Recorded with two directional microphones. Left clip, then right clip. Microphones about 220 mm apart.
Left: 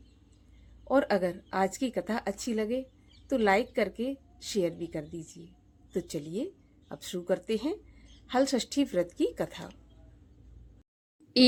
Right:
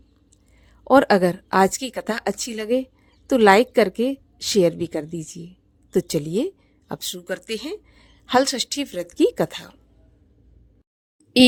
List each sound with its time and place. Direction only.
0.9 s a woman's voice: 45° right (ahead or behind)